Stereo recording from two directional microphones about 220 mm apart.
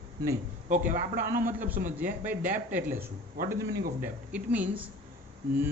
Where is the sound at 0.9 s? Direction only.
40° right (ahead or behind).